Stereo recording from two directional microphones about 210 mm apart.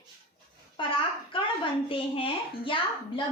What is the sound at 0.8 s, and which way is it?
Babbling, 25° left (ahead or behind).